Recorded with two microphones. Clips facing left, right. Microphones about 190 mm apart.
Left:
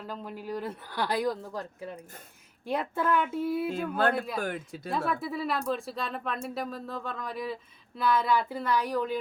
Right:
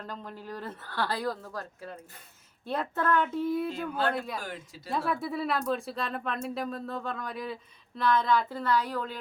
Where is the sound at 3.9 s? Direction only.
55° left (ahead or behind).